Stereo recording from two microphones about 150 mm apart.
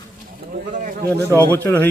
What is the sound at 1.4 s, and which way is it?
Speech, 15° left (ahead or behind).